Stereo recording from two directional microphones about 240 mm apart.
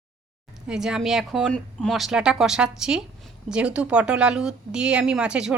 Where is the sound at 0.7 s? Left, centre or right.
Centre.